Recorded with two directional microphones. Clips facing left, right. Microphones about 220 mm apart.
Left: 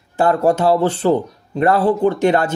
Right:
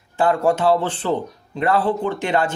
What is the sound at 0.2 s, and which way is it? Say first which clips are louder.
Speech: left 3 dB; 40° left (ahead or behind).